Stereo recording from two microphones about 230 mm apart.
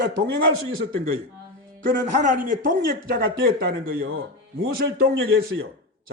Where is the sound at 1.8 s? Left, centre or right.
Right.